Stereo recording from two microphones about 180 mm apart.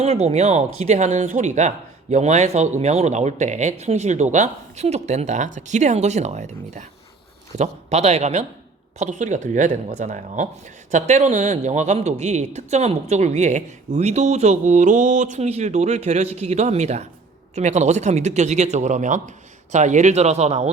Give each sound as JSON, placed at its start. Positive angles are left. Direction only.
{"t": 0.0, "sound": "speech", "side_deg": -35}